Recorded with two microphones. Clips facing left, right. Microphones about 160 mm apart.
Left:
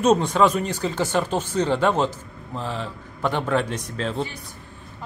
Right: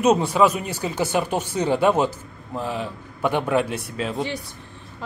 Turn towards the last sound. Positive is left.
turn(degrees=-10)  # may be behind; listen again after turning